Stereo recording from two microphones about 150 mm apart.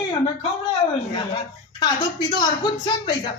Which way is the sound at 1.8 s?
30° left (ahead or behind).